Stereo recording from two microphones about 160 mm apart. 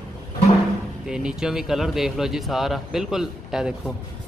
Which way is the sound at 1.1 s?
5° right (ahead or behind).